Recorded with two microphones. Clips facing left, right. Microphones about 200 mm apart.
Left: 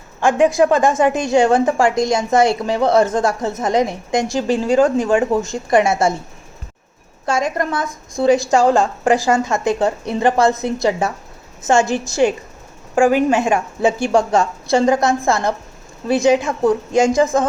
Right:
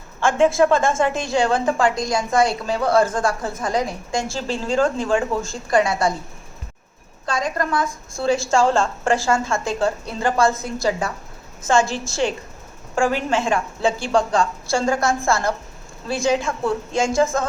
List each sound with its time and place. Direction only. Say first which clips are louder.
0.3 s a woman's voice: left 2 dB; 15° left (ahead or behind)
7.3 s a woman's voice: left 4 dB; 25° left (ahead or behind)